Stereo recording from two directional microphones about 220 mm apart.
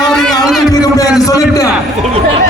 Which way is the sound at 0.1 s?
5° left (ahead or behind).